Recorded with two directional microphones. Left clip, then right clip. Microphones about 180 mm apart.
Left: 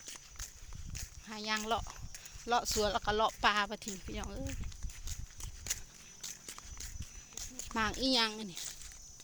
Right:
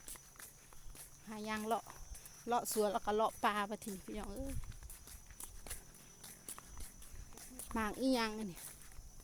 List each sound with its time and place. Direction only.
1.3 s speech: 15° right (ahead or behind)
7.7 s speech: 10° right (ahead or behind)